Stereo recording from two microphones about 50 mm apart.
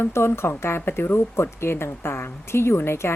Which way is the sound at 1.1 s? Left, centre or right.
Left.